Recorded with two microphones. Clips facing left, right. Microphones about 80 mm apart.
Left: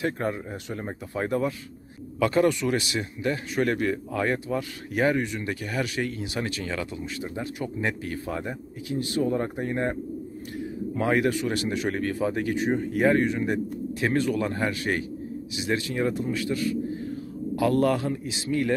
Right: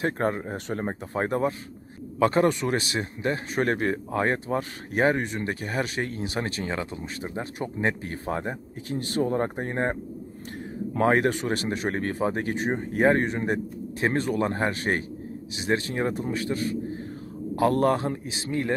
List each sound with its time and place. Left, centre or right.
0.0 s a man's voice: right